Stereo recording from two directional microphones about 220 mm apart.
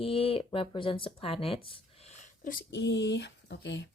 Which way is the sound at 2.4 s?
45° left (ahead or behind).